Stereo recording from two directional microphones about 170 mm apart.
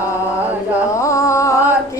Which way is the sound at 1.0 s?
20° left (ahead or behind).